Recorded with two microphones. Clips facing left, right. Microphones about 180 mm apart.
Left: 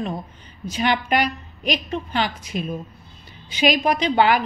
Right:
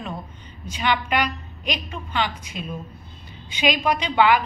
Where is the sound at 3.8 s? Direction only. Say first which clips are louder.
Left 1 dB; 40° left (ahead or behind).